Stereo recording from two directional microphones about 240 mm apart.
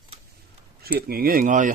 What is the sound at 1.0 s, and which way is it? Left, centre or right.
Speech, right.